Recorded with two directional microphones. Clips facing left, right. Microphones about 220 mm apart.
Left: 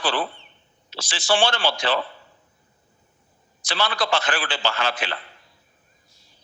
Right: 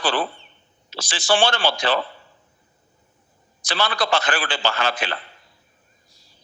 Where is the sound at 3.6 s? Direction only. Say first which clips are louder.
Right 2 dB; 45° right (ahead or behind).